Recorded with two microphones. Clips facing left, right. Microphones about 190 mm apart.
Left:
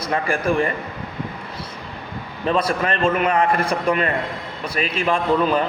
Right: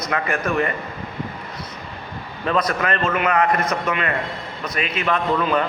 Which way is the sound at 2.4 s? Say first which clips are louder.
Left 1 dB; 30° left (ahead or behind).